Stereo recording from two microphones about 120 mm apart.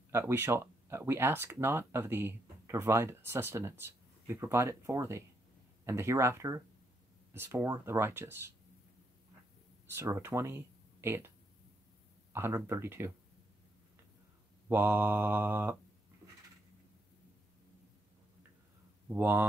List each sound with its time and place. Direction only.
0.1 s speech: 20° right (ahead or behind)
9.9 s speech: 20° right (ahead or behind)
14.7 s mantra: 15° right (ahead or behind)
19.0 s mantra: 15° right (ahead or behind)